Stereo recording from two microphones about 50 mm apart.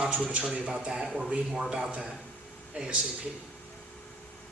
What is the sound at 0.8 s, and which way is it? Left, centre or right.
A man's voice, centre.